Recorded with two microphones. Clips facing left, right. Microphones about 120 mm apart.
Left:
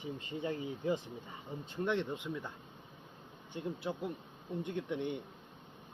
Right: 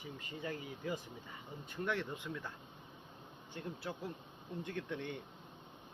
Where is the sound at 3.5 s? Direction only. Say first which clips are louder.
Left 5 dB; 20° left (ahead or behind).